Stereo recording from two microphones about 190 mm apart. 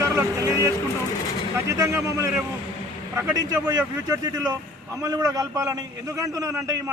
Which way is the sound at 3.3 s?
20° right (ahead or behind).